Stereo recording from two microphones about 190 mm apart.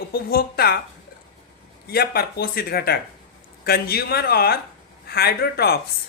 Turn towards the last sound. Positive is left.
turn(degrees=55)  # may be behind; listen again after turning